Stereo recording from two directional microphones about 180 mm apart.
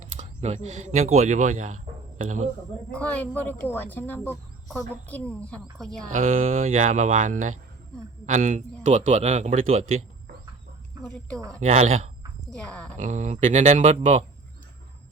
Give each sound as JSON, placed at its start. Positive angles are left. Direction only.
{"t": 0.0, "sound": "speech", "side_deg": -40}
{"t": 2.9, "sound": "a woman's voice", "side_deg": 5}
{"t": 6.4, "sound": "speech", "side_deg": -35}
{"t": 11.6, "sound": "speech", "side_deg": -40}
{"t": 12.5, "sound": "a woman's voice", "side_deg": 5}
{"t": 13.0, "sound": "speech", "side_deg": -40}